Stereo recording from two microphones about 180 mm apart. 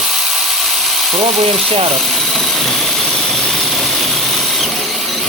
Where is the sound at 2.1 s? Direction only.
Centre (ahead or behind).